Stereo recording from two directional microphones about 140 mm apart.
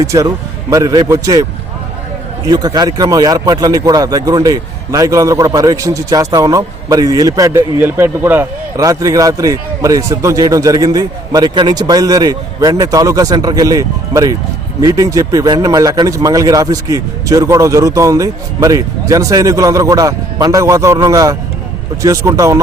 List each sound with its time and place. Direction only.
0.0 s speech: 25° right (ahead or behind)
2.5 s speech: 25° right (ahead or behind)